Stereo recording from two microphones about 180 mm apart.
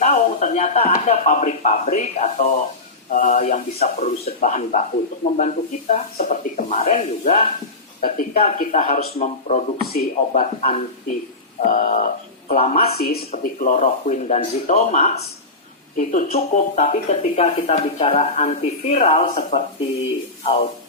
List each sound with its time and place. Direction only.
0.0 s speech: 40° left (ahead or behind)
9.8 s speech: 60° left (ahead or behind)
11.6 s speech: 45° left (ahead or behind)
12.8 s speech: 60° left (ahead or behind)
13.3 s speech: 45° left (ahead or behind)